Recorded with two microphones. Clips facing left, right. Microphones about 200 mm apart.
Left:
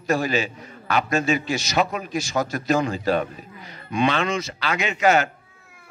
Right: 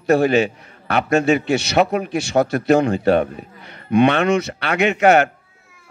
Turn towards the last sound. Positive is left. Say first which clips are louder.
# right 6 dB
turn(degrees=-60)  # may be behind; listen again after turning